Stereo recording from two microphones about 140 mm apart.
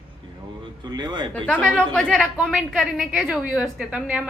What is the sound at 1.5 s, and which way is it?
A woman's voice, 10° left (ahead or behind).